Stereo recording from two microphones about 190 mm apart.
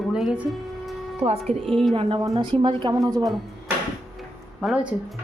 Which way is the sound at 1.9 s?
30° right (ahead or behind).